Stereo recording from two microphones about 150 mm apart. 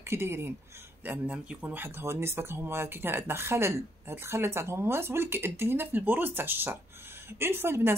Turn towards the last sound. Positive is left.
turn(degrees=-15)  # may be behind; listen again after turning